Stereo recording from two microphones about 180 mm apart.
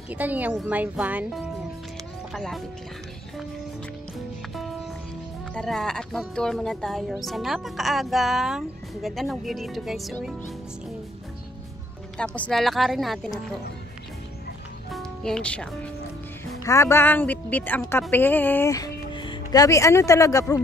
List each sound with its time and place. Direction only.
0.1 s speech: 10° right (ahead or behind)
5.5 s speech: 5° left (ahead or behind)
12.2 s speech: 5° left (ahead or behind)
14.9 s speech: 5° left (ahead or behind); by 20.6 s 20° left (ahead or behind)